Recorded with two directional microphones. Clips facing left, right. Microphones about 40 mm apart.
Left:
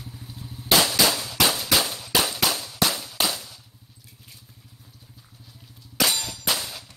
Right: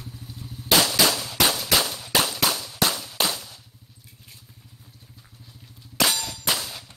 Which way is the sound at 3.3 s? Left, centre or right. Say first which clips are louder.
Even; centre.